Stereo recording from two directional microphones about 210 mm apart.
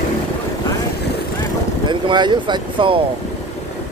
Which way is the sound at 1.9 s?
20° right (ahead or behind).